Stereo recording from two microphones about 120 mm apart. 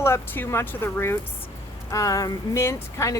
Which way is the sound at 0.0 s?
20° left (ahead or behind).